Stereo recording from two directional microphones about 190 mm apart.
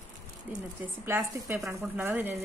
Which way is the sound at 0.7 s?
10° right (ahead or behind).